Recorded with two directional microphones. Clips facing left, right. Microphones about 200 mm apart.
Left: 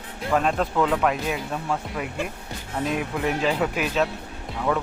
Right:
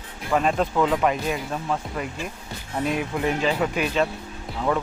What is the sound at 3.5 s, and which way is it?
Music, centre (ahead or behind).